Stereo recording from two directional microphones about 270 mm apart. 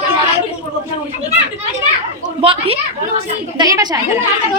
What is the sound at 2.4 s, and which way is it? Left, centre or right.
A woman's voice, centre.